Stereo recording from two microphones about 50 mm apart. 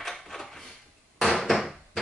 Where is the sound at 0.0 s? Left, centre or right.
Centre.